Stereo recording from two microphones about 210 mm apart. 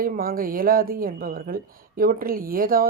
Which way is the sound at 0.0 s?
45° right (ahead or behind).